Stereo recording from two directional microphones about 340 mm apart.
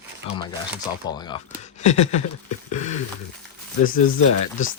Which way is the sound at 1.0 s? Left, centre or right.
Centre.